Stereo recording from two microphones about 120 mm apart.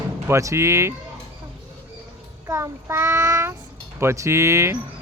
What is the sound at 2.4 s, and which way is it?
Speech, 25° right (ahead or behind).